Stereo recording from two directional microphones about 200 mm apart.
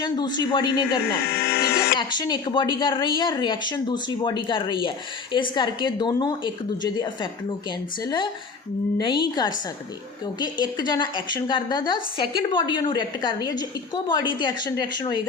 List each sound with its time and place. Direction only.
0.0 s speech: 20° left (ahead or behind)
1.3 s music: 55° left (ahead or behind)
2.0 s speech: 20° left (ahead or behind)